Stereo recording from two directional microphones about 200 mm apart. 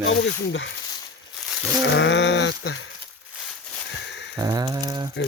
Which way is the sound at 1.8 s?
65° left (ahead or behind).